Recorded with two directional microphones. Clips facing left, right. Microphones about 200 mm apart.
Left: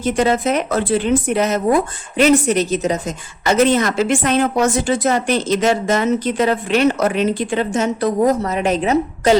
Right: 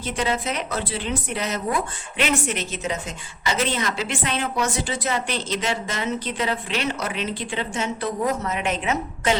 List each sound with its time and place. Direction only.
0.0 s a woman's voice: 45° left (ahead or behind)